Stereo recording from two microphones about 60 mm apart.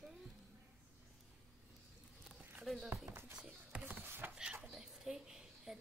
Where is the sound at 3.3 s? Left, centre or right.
Centre.